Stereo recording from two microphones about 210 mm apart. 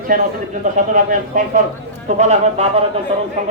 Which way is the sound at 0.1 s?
40° right (ahead or behind).